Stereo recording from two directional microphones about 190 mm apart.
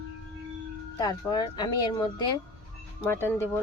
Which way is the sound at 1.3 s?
20° left (ahead or behind).